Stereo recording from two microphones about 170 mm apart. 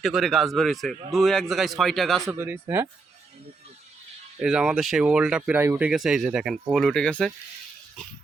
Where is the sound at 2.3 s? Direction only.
15° right (ahead or behind).